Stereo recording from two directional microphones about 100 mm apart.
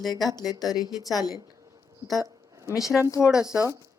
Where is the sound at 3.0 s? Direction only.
30° left (ahead or behind).